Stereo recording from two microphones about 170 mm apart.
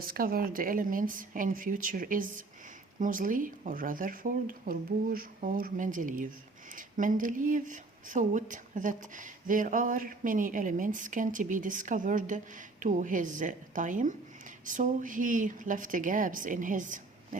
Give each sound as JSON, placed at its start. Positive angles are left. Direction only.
{"t": 0.0, "sound": "speech", "side_deg": -60}